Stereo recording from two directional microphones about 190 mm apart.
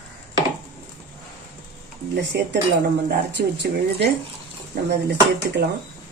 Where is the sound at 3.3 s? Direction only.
60° right (ahead or behind).